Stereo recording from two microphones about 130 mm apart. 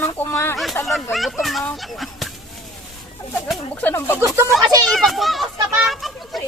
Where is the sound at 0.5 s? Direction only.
Centre (ahead or behind).